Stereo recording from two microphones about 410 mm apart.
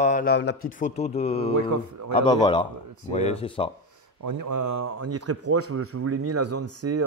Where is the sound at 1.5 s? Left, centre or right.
Right.